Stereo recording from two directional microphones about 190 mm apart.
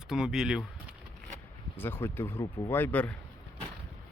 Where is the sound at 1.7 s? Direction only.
10° left (ahead or behind).